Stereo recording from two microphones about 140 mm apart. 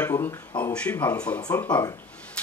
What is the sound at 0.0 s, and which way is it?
Speech, 15° left (ahead or behind).